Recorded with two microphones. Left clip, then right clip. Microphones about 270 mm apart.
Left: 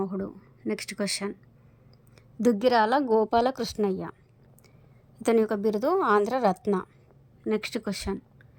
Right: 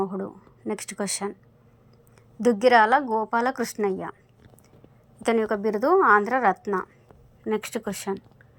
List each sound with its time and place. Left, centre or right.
0.0 s speech: centre
2.5 s a woman's voice: left
3.3 s a woman's voice: left
5.2 s a woman's voice: left
7.4 s a woman's voice: centre